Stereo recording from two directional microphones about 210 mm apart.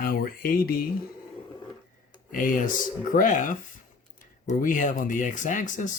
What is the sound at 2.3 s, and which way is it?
Speech, 40° left (ahead or behind).